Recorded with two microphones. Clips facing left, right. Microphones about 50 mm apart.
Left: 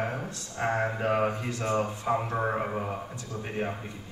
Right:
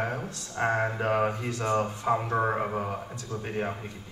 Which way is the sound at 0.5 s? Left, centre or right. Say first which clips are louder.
Right 2 dB; right.